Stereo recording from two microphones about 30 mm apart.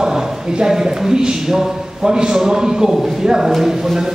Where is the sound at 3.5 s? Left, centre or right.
Centre.